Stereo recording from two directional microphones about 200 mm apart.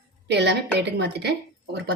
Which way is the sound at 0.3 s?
60° right (ahead or behind).